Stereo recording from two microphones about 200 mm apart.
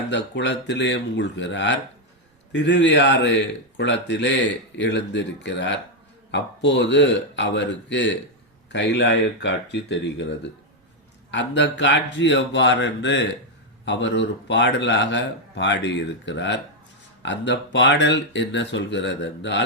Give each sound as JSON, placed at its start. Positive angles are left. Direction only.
{"t": 0.1, "sound": "speech", "side_deg": 60}